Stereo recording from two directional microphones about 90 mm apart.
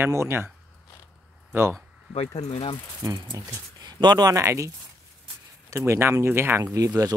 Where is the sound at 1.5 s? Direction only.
25° right (ahead or behind).